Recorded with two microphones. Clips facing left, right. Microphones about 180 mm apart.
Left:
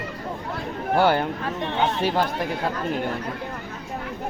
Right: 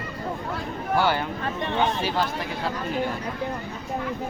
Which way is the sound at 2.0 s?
50° left (ahead or behind).